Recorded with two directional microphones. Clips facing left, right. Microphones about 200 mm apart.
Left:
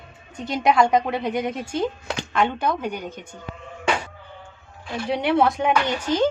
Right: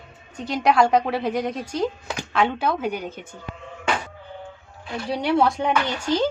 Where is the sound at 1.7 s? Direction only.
25° left (ahead or behind).